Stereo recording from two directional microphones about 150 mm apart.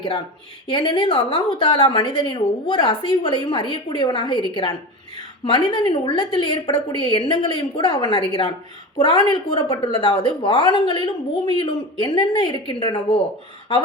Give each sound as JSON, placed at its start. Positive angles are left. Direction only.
{"t": 0.7, "sound": "a woman's voice", "side_deg": 30}